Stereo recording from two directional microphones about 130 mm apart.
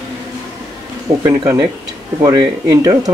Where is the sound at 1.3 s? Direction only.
25° right (ahead or behind).